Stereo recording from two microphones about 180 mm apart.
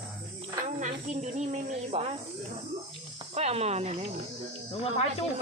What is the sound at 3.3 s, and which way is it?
Speech, 35° right (ahead or behind).